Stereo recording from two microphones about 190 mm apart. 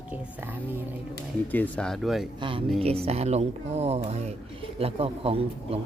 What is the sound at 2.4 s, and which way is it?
Speech, 25° right (ahead or behind).